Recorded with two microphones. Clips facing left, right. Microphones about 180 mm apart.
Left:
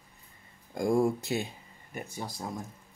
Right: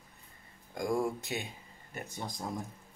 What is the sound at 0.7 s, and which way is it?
Speech, 30° left (ahead or behind).